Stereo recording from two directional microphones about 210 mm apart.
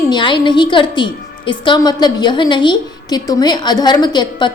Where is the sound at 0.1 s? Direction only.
20° left (ahead or behind).